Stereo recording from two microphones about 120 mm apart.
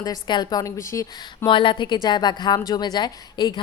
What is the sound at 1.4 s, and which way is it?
A woman's voice, 45° left (ahead or behind).